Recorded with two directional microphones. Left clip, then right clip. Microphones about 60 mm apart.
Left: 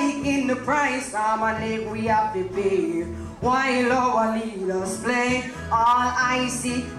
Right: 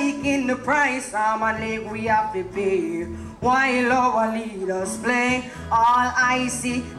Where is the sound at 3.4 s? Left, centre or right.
Right.